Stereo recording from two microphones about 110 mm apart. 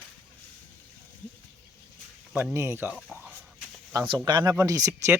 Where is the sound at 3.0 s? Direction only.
10° right (ahead or behind).